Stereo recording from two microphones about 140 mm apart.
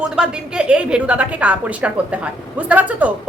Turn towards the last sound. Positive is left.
turn(degrees=-10)  # may be behind; listen again after turning